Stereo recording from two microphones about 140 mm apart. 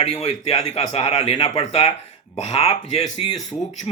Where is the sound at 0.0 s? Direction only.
45° left (ahead or behind).